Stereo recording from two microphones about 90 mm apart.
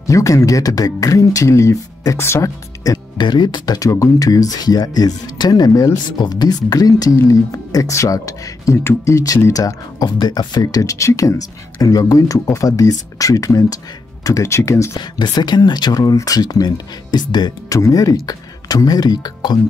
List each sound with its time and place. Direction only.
0.0 s speech: 40° left (ahead or behind)
3.3 s speech: 55° left (ahead or behind); by 15.0 s 35° left (ahead or behind)
15.0 s speech: 55° left (ahead or behind)
17.7 s speech: 35° left (ahead or behind)